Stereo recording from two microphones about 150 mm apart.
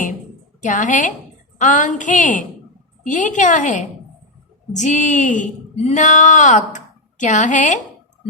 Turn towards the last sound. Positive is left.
turn(degrees=55)  # may be behind; listen again after turning